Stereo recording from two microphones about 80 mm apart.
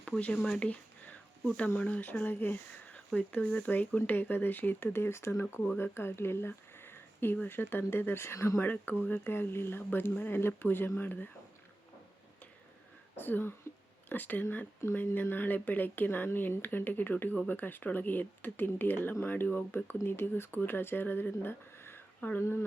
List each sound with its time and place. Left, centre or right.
0.4 s a sound: centre
1.5 s speech: centre
13.1 s speech: left